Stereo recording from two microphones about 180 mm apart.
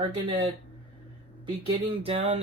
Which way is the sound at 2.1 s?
35° right (ahead or behind).